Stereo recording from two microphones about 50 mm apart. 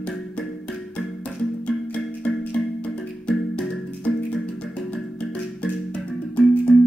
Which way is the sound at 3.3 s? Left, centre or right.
Left.